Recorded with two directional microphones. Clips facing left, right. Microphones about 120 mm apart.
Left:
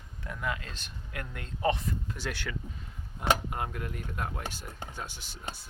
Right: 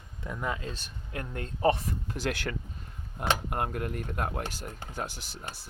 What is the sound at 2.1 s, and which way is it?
Speech, 50° right (ahead or behind).